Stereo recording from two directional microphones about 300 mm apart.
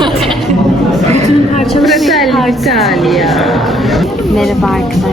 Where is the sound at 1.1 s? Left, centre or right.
Right.